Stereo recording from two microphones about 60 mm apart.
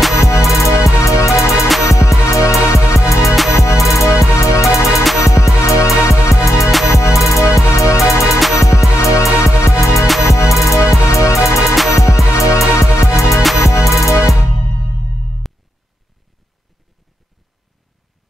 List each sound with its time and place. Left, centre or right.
0.2 s music: left